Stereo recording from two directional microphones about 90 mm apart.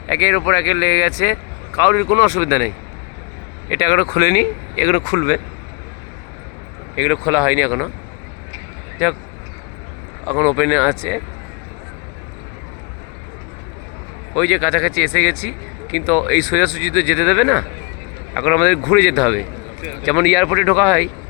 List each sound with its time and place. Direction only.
0.1 s speech: 30° left (ahead or behind)
3.7 s speech: 40° left (ahead or behind)
4.2 s speech: 35° left (ahead or behind)
4.8 s speech: 85° left
6.9 s speech: 15° right (ahead or behind)
9.0 s speech: 5° right (ahead or behind)
10.3 s speech: 20° right (ahead or behind)
14.3 s speech: 5° left (ahead or behind)